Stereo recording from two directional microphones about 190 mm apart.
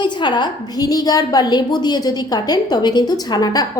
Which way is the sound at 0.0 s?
25° left (ahead or behind).